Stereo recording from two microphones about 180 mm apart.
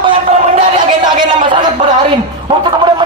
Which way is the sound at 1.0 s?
25° right (ahead or behind).